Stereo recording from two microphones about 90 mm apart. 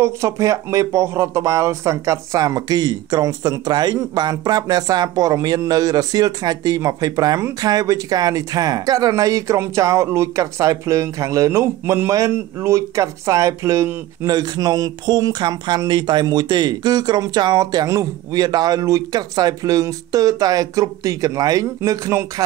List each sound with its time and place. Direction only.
0.0 s speech: 35° right (ahead or behind)
14.2 s speech: 45° right (ahead or behind)